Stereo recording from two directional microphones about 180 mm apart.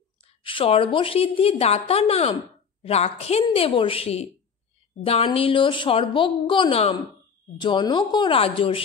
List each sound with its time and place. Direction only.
0.2 s a woman's voice: 30° left (ahead or behind)